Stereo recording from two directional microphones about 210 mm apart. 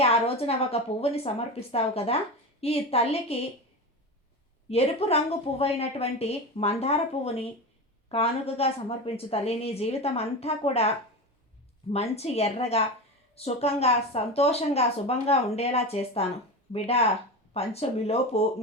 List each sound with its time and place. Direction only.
0.0 s a woman's voice: 30° left (ahead or behind)
4.7 s a woman's voice: 30° left (ahead or behind)